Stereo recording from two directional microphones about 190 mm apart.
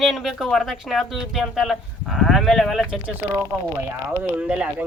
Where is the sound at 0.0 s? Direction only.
Centre (ahead or behind).